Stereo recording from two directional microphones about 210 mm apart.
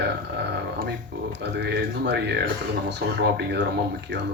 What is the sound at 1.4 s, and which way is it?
Speech, 55° right (ahead or behind).